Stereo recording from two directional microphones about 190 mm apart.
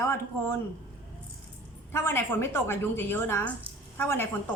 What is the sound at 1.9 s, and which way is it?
A woman's voice, 10° left (ahead or behind).